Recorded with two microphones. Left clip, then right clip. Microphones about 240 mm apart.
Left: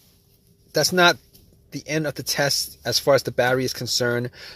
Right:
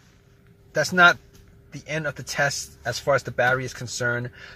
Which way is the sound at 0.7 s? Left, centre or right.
Left.